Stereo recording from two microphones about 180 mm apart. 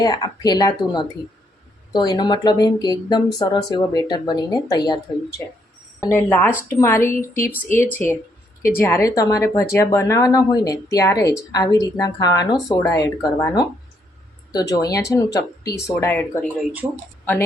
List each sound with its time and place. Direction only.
0.0 s speech: 20° left (ahead or behind)
6.0 s speech: 15° left (ahead or behind)